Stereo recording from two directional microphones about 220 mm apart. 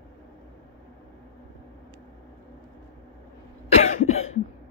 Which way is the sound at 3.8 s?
30° left (ahead or behind).